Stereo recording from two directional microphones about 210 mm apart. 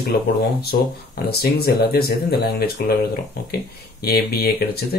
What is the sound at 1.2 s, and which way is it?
Speech, 50° left (ahead or behind).